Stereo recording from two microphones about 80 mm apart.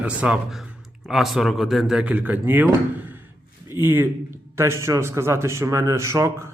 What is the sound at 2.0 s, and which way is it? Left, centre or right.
Speech, right.